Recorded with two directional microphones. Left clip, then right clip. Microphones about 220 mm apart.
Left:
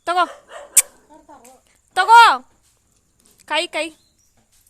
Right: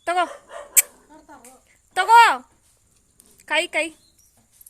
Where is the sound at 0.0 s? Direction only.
10° left (ahead or behind).